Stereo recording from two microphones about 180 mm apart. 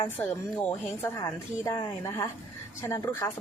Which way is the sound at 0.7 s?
15° left (ahead or behind).